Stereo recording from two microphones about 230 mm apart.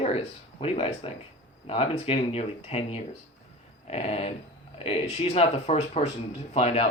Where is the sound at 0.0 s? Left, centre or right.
Left.